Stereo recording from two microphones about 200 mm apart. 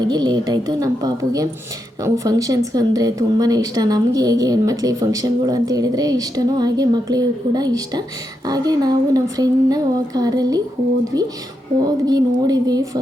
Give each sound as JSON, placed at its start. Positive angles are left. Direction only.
{"t": 0.0, "sound": "speech", "side_deg": -20}